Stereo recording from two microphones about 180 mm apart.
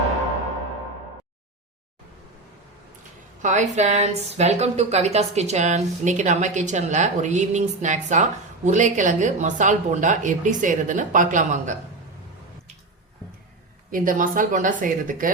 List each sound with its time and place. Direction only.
3.4 s a woman's voice: 40° right (ahead or behind)
13.9 s speech: 50° right (ahead or behind)